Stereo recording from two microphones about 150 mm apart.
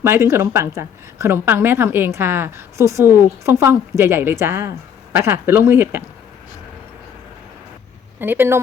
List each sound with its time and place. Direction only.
0.0 s a woman's voice: 15° right (ahead or behind)
8.2 s a woman's voice: 15° right (ahead or behind)